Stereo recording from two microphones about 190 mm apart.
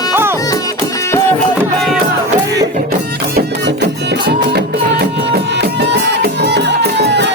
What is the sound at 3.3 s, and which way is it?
Music, 60° right (ahead or behind).